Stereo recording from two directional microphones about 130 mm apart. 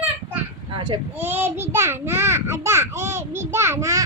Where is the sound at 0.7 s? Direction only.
40° right (ahead or behind).